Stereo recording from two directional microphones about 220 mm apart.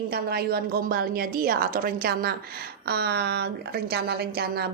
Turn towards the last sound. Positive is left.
turn(degrees=-45)  # may be behind; listen again after turning